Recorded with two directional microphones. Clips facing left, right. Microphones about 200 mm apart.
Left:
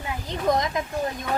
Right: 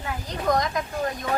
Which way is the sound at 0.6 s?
20° left (ahead or behind).